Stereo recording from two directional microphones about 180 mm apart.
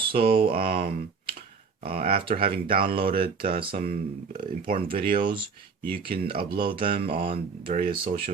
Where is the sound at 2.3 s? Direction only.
55° right (ahead or behind).